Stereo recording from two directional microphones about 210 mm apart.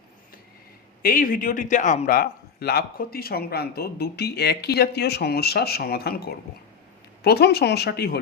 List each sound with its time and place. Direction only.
1.0 s a man's voice: 40° left (ahead or behind)